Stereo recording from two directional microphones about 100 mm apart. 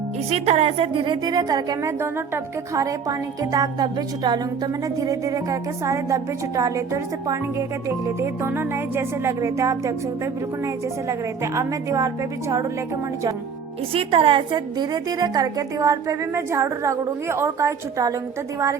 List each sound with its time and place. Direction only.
0.3 s a woman's voice: 90° right; by 1.9 s 40° right (ahead or behind)
2.0 s music: 25° right (ahead or behind)
2.7 s a woman's voice: 35° right (ahead or behind)
7.9 s music: 30° right (ahead or behind)
11.1 s a woman's voice: 30° right (ahead or behind)
13.9 s a woman's voice: 65° right (ahead or behind); by 18.2 s 30° right (ahead or behind)